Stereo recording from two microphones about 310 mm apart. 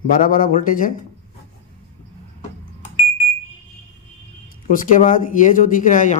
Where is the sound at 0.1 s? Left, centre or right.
Left.